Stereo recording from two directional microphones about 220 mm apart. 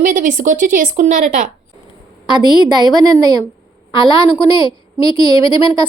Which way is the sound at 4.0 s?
20° left (ahead or behind).